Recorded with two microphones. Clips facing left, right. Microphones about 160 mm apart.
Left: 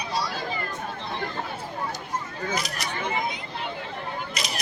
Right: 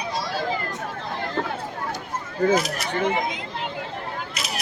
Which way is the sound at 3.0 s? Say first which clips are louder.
Right 4 dB; 90° right.